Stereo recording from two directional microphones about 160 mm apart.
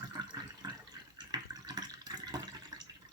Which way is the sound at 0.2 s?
25° right (ahead or behind).